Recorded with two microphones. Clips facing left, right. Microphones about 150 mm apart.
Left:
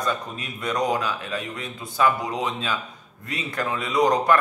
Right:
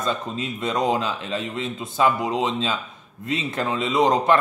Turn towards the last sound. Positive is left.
turn(degrees=-25)  # may be behind; listen again after turning